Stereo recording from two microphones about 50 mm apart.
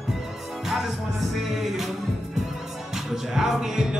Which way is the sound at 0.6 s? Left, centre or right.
Centre.